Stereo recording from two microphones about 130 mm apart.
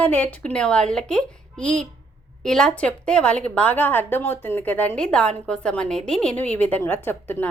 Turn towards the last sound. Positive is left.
turn(degrees=15)  # may be behind; listen again after turning